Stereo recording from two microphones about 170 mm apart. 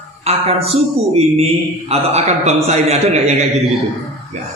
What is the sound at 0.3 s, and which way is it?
A man's voice, 35° right (ahead or behind).